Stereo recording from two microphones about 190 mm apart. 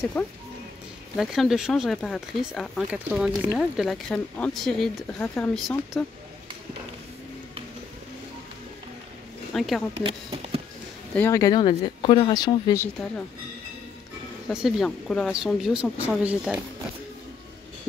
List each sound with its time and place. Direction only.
0.2 s speech: 5° left (ahead or behind)
9.5 s speech: centre (ahead or behind)
10.0 s speech: 30° right (ahead or behind)
11.1 s speech: 15° left (ahead or behind)
14.5 s speech: centre (ahead or behind)